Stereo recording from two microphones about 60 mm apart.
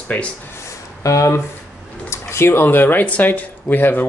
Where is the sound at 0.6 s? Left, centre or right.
Left.